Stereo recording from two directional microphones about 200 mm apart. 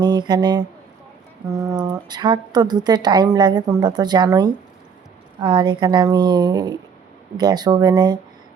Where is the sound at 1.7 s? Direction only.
20° right (ahead or behind).